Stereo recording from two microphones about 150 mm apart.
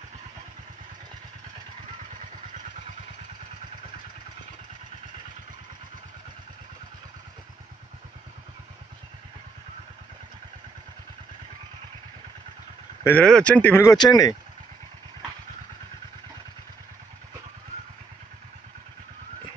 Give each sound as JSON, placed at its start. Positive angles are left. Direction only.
{"t": 13.0, "sound": "speech", "side_deg": 10}
{"t": 13.9, "sound": "speech", "side_deg": 25}